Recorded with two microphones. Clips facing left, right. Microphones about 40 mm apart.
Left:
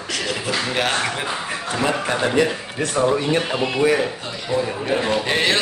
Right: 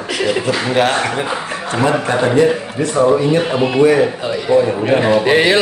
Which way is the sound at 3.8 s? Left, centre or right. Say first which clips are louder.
Right 7 dB; centre.